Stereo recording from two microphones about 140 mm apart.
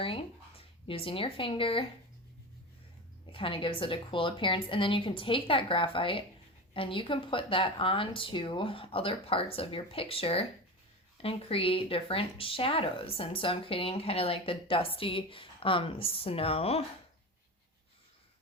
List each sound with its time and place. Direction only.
0.0 s speech: 40° left (ahead or behind)
3.3 s speech: 40° left (ahead or behind)